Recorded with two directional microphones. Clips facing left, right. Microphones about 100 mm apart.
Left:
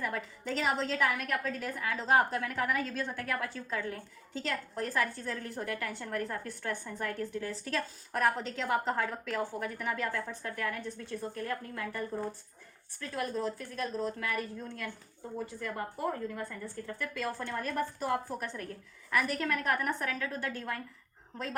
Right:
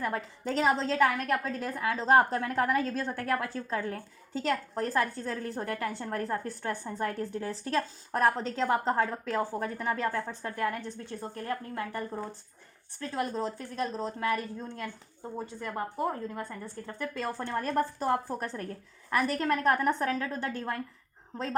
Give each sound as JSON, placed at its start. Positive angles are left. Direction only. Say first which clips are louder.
{"t": 0.0, "sound": "a woman's voice", "louder": "right 4 dB", "side_deg": -35}